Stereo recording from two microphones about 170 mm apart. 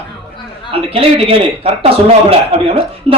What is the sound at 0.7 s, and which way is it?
A man's voice, 35° right (ahead or behind).